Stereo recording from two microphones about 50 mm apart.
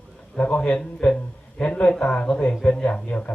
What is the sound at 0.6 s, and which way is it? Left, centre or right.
A man's voice, centre.